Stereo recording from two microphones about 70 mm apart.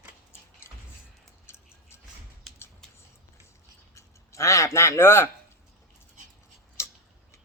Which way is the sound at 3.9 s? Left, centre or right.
Left.